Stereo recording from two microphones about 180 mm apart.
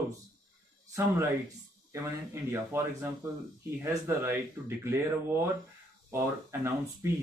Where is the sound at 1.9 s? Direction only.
15° right (ahead or behind).